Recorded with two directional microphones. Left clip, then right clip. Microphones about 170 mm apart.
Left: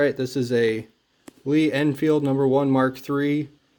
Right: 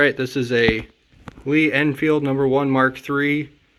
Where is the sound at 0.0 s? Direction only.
Centre (ahead or behind).